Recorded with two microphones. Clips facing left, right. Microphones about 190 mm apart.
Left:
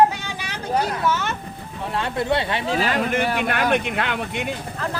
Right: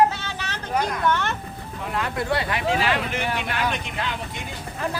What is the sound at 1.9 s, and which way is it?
Speech, 25° left (ahead or behind).